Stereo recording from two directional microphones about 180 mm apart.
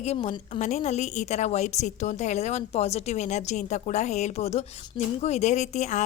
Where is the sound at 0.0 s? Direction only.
40° left (ahead or behind).